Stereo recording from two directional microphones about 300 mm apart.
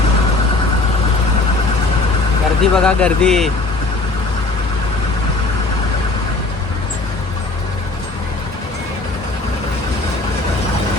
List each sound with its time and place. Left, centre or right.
2.6 s speech: centre